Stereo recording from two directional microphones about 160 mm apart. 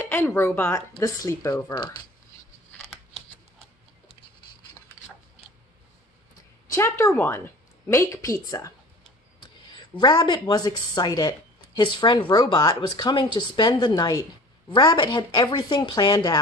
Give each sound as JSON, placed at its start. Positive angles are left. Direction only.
{"t": 0.0, "sound": "speech", "side_deg": 10}
{"t": 6.7, "sound": "speech", "side_deg": 15}
{"t": 9.9, "sound": "speech", "side_deg": 30}